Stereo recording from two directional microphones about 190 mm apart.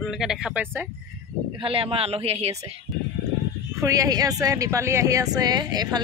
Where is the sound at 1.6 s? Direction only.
30° right (ahead or behind).